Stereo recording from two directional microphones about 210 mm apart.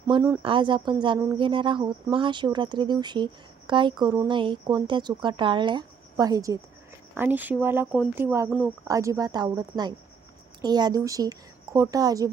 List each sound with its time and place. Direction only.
0.1 s a woman's voice: 20° right (ahead or behind)